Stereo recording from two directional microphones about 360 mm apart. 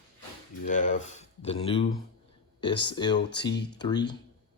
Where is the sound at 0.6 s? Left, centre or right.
Left.